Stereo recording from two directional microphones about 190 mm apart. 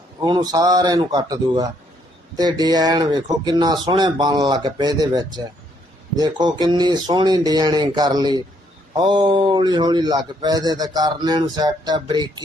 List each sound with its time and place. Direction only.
0.2 s a man's voice: 20° right (ahead or behind)